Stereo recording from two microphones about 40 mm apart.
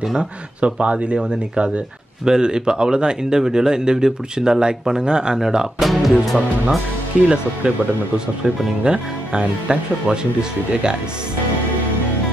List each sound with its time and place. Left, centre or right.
0.0 s speech: centre
0.6 s speech: right
5.8 s speech: centre
7.6 s speech: right
8.8 s speech: right